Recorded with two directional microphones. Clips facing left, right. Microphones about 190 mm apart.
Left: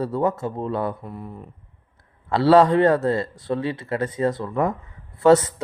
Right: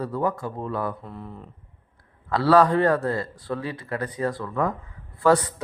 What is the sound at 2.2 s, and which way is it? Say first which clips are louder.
Speech: left 3 dB; 25° left (ahead or behind).